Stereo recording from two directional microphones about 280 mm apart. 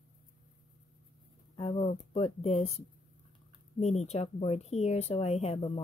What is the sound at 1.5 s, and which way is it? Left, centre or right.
Speech, centre.